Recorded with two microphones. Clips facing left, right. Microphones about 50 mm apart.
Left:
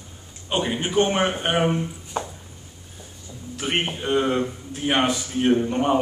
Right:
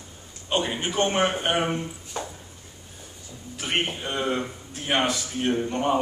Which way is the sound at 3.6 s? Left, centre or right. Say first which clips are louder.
Left 2 dB; centre.